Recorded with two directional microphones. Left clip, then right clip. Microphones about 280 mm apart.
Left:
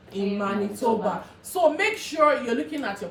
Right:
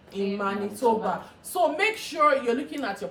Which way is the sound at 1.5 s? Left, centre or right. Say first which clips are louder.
Left 2 dB; centre.